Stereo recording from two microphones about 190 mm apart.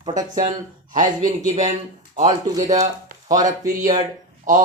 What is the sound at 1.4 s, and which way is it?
Speech, 40° right (ahead or behind).